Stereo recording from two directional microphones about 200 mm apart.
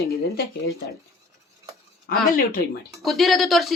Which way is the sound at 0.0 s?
50° left (ahead or behind).